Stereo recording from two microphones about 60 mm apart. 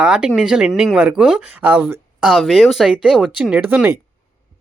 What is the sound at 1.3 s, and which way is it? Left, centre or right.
Speech, right.